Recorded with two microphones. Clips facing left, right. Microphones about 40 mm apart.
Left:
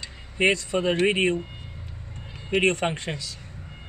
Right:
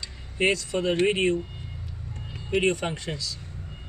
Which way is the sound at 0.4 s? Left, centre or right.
Left.